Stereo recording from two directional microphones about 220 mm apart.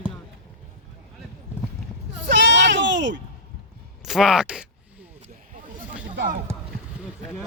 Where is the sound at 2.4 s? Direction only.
55° right (ahead or behind).